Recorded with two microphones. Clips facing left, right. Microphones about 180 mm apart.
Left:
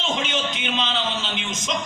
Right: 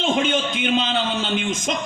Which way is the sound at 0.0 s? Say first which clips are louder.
Right 5 dB; 55° right (ahead or behind).